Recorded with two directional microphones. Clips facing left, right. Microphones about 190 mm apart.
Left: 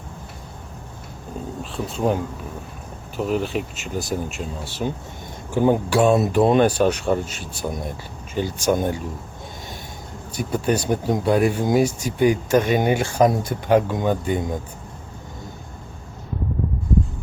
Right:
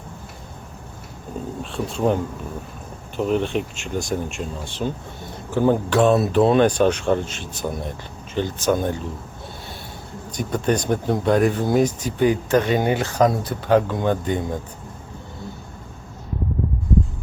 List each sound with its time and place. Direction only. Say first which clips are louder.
1.7 s speech: right 1 dB; centre (ahead or behind)
3.2 s speech: right 2 dB; 5° left (ahead or behind)
10.3 s speech: even; 10° left (ahead or behind)